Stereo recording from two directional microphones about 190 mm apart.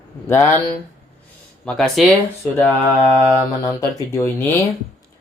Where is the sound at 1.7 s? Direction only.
Centre (ahead or behind).